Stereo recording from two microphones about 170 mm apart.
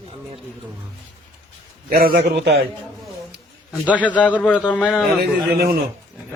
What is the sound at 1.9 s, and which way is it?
Speech, 60° right (ahead or behind).